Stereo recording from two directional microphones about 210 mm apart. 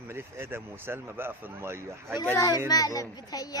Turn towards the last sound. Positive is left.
turn(degrees=15)  # may be behind; listen again after turning